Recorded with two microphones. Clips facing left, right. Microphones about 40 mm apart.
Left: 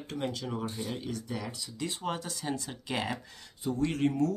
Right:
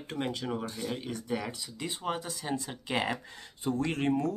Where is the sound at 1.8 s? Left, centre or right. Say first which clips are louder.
Even; centre.